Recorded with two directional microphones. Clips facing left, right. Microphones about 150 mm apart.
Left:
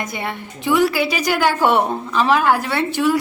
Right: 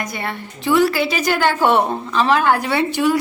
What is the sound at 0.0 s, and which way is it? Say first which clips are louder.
A woman's voice: even; 20° left (ahead or behind).